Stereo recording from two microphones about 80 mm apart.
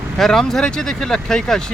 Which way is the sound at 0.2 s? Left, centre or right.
Centre.